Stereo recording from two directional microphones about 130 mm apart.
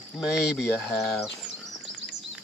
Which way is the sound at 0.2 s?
5° right (ahead or behind).